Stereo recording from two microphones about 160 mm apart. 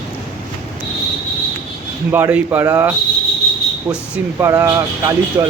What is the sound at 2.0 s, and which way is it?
Speech, 15° right (ahead or behind).